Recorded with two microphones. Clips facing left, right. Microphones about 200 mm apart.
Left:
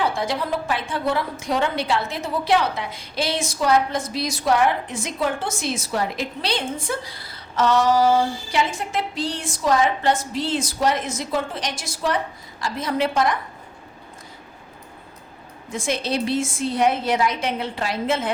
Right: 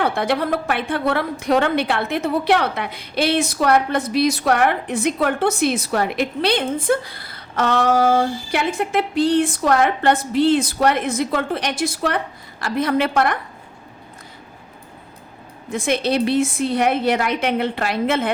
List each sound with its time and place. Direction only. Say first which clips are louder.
0.0 s a woman's voice: right 4 dB; 60° right (ahead or behind)
15.7 s a woman's voice: right 5 dB; 60° right (ahead or behind)